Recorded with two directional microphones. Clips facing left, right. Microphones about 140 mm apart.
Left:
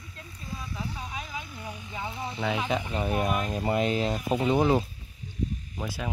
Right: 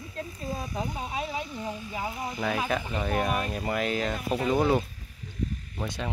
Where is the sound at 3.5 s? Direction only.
25° left (ahead or behind).